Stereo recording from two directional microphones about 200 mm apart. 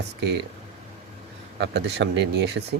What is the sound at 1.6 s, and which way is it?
Speech, 60° right (ahead or behind).